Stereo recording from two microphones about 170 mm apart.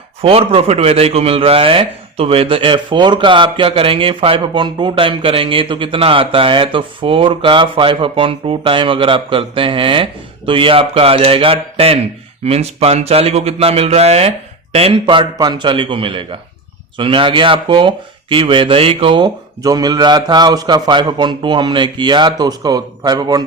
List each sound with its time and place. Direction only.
0.2 s a man's voice: 35° right (ahead or behind)